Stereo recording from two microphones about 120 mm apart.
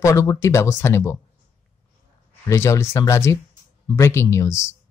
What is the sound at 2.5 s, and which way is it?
Speech, 25° left (ahead or behind).